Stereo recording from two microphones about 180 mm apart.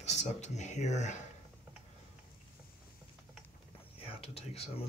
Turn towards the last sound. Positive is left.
turn(degrees=35)  # may be behind; listen again after turning